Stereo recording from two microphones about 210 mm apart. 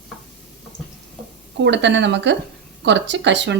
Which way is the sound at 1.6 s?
55° right (ahead or behind).